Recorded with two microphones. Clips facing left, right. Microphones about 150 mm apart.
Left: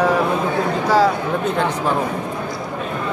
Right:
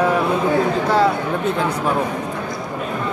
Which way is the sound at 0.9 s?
Centre (ahead or behind).